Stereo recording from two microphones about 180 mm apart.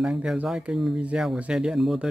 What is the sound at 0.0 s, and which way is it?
Speech, 5° right (ahead or behind).